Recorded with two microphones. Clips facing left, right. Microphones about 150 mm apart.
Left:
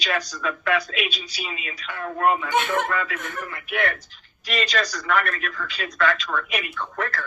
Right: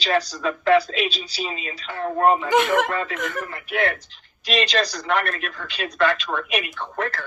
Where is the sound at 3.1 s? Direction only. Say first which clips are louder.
Right 5 dB; 90° right.